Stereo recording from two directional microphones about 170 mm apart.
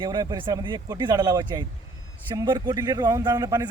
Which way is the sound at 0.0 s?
25° right (ahead or behind).